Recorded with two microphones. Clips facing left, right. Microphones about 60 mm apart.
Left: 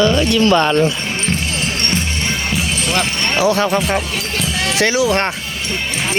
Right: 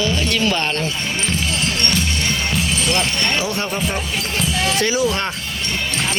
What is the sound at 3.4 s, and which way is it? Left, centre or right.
Speech, left.